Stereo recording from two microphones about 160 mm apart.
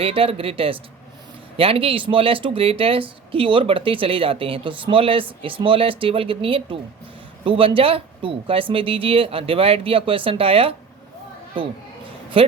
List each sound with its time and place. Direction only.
0.0 s speech: 35° right (ahead or behind)
12.4 s speech: 35° right (ahead or behind)